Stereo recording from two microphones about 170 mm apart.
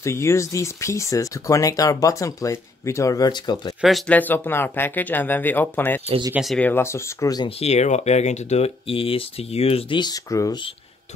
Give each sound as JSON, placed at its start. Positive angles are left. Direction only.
{"t": 0.0, "sound": "speech", "side_deg": 15}
{"t": 3.8, "sound": "speech", "side_deg": 0}
{"t": 4.2, "sound": "speech", "side_deg": 10}
{"t": 6.0, "sound": "speech", "side_deg": -30}
{"t": 6.3, "sound": "speech", "side_deg": 0}
{"t": 6.7, "sound": "speech", "side_deg": 15}
{"t": 7.4, "sound": "speech", "side_deg": 40}